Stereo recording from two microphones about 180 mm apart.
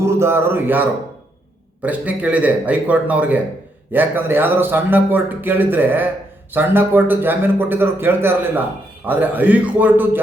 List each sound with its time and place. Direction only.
0.0 s a man's voice: 15° right (ahead or behind)